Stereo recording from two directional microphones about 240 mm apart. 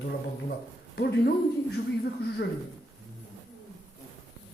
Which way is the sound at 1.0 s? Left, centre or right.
Left.